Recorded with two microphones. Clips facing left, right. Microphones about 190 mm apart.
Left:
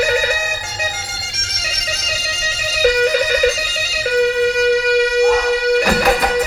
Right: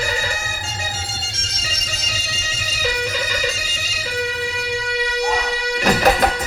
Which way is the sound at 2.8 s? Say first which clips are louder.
Left 10 dB; 60° left (ahead or behind).